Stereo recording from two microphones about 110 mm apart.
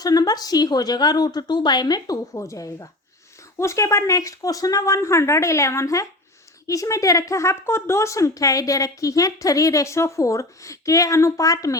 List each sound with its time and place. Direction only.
0.0 s a woman's voice: 35° left (ahead or behind)